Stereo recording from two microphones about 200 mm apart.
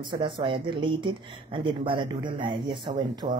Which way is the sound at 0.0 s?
25° right (ahead or behind).